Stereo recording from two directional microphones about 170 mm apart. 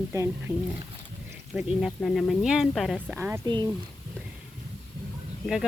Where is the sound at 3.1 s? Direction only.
10° right (ahead or behind).